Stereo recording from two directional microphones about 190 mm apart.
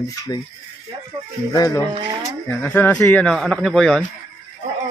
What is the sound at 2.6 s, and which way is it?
Speech, 10° left (ahead or behind).